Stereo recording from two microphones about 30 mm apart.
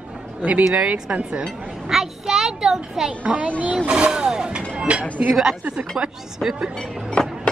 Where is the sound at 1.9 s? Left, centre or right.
Centre.